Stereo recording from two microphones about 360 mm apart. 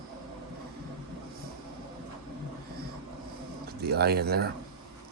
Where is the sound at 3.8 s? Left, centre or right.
Right.